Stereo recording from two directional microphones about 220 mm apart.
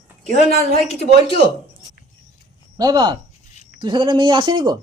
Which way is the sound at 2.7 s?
15° right (ahead or behind).